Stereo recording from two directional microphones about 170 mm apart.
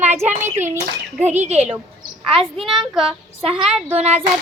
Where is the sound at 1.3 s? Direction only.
40° right (ahead or behind).